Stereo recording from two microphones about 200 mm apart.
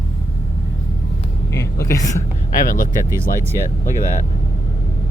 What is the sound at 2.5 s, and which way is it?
Speech, 45° left (ahead or behind).